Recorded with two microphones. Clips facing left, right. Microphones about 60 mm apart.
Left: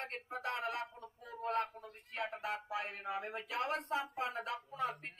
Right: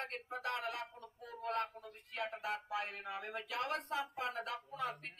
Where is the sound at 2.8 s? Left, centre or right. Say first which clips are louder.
Left 2 dB; left.